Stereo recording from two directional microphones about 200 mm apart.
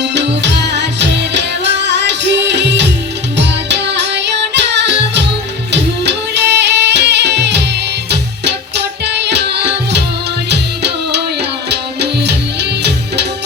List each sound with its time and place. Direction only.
0.0 s music: 60° right (ahead or behind)